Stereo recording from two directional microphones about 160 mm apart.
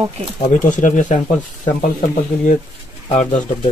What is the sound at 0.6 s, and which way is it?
Speech, 50° left (ahead or behind).